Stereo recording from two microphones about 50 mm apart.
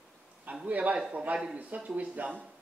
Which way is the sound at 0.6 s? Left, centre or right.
Right.